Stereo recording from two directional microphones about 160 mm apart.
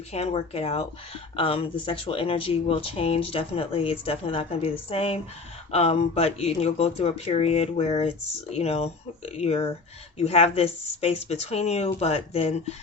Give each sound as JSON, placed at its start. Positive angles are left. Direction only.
{"t": 0.1, "sound": "a woman's voice", "side_deg": 40}